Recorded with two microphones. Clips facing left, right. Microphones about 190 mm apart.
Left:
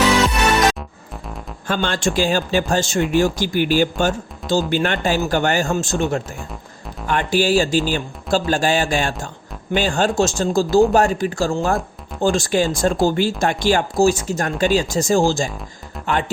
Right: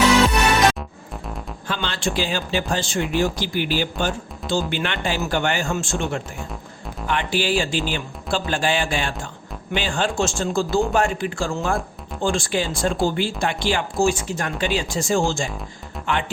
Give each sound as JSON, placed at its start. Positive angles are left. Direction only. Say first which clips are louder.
{"t": 1.6, "sound": "speech", "louder": "left 5 dB", "side_deg": 45}
{"t": 16.0, "sound": "music", "louder": "left 2 dB", "side_deg": 0}